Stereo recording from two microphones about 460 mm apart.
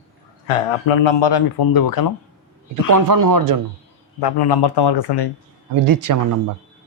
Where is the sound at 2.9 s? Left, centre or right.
Right.